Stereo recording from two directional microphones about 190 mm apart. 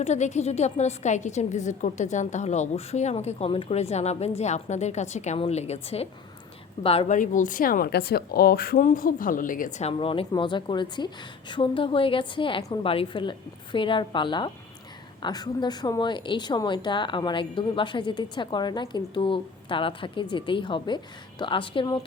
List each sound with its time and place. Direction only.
0.0 s a woman's voice: 35° left (ahead or behind)